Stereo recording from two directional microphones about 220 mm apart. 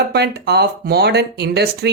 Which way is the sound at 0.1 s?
50° right (ahead or behind).